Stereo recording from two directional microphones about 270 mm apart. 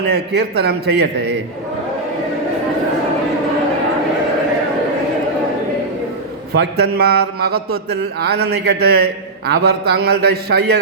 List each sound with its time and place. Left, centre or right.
0.1 s a man's voice: right
6.5 s a man's voice: right